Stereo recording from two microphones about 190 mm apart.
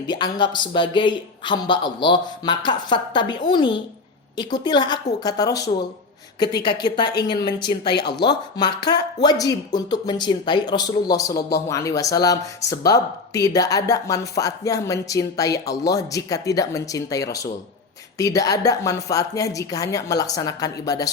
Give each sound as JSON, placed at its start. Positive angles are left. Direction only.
{"t": 0.1, "sound": "a man's voice", "side_deg": 25}
{"t": 7.9, "sound": "speech", "side_deg": 60}
{"t": 8.2, "sound": "a man's voice", "side_deg": 20}